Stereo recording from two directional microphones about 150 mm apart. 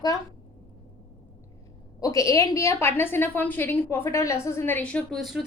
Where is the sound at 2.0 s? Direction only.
20° left (ahead or behind); by 5.5 s centre (ahead or behind).